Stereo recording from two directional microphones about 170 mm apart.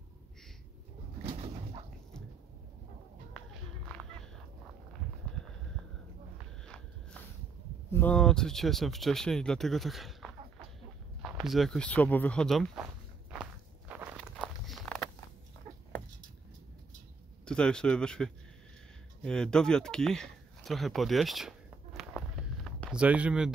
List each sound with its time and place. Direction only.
1.2 s bird: 40° right (ahead or behind)
6.6 s a sound: 5° left (ahead or behind)
7.9 s speech: 10° left (ahead or behind)
13.3 s walk: 5° right (ahead or behind)
17.5 s speech: 5° left (ahead or behind)
19.2 s a sound: 5° left (ahead or behind)
22.9 s speech: 5° right (ahead or behind)